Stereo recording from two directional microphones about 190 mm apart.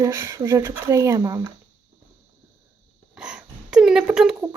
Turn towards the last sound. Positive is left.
turn(degrees=-5)  # may be behind; listen again after turning